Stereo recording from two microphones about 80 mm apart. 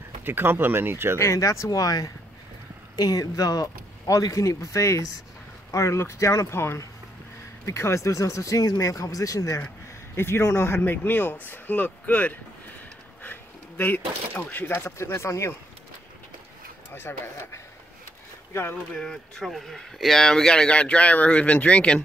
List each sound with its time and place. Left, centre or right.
0.2 s speech: right
1.1 s speech: left
10.1 s speech: left
16.9 s speech: left
18.9 s speech: centre